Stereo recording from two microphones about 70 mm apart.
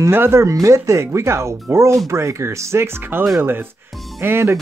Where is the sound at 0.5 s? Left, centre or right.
Right.